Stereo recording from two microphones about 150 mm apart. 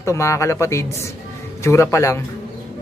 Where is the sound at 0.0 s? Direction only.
20° left (ahead or behind).